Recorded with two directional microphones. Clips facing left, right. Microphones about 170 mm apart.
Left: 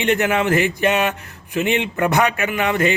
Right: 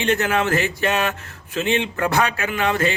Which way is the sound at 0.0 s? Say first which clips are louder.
Left 2 dB; 20° left (ahead or behind).